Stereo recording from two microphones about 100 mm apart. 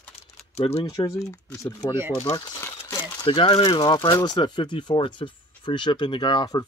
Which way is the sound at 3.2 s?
65° left (ahead or behind).